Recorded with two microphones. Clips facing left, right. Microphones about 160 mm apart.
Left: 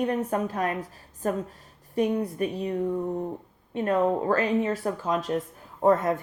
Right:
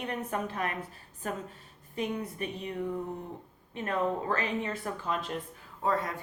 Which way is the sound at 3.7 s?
40° left (ahead or behind).